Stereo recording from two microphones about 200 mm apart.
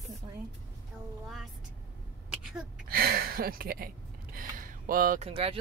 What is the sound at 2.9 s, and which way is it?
Speech, 50° right (ahead or behind).